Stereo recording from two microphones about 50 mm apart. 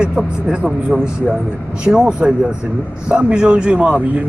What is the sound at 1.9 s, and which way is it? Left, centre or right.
Speech, centre.